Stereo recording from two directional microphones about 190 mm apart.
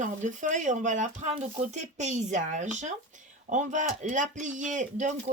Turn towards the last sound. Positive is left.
turn(degrees=-40)  # may be behind; listen again after turning